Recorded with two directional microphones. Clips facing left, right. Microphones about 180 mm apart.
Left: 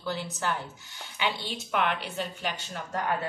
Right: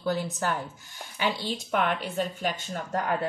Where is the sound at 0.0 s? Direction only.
45° right (ahead or behind).